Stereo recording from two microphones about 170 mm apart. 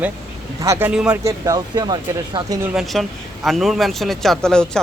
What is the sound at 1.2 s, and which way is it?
Speech, 20° right (ahead or behind).